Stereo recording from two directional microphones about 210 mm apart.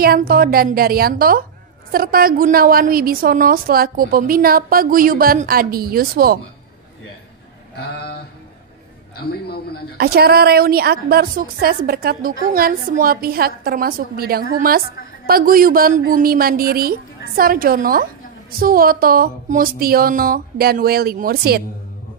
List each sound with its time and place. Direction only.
0.0 s a woman's voice: 45° right (ahead or behind)
7.8 s a sound: 50° left (ahead or behind)
9.9 s a woman's voice: 45° right (ahead or behind)